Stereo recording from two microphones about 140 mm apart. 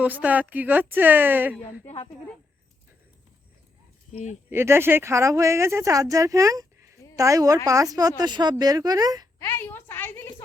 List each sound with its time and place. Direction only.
0.0 s a woman's voice: 10° right (ahead or behind)
4.1 s speech: 55° left (ahead or behind)
4.4 s speech: 15° right (ahead or behind)
9.4 s a woman's voice: 15° left (ahead or behind)